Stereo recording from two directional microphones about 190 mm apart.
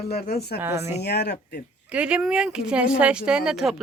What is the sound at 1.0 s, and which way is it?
Speech, 60° left (ahead or behind).